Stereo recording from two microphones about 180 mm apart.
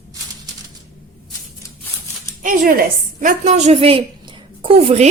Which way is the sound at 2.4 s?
50° right (ahead or behind).